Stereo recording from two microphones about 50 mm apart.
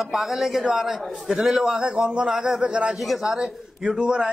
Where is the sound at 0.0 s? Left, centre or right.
Centre.